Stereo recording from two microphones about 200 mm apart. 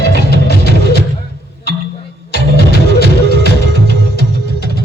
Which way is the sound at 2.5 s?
55° left (ahead or behind).